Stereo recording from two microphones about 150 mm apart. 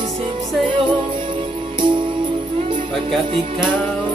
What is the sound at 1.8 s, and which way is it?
Music, 35° right (ahead or behind).